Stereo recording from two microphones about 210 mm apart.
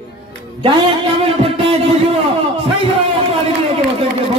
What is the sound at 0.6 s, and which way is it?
A man's voice, 25° right (ahead or behind).